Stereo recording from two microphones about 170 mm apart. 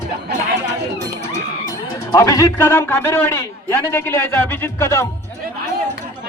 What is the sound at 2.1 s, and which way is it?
A man's voice, 20° left (ahead or behind).